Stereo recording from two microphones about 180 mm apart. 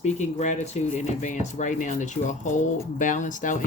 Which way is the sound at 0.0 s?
40° left (ahead or behind).